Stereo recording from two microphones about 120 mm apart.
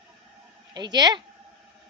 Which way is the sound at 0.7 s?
35° right (ahead or behind).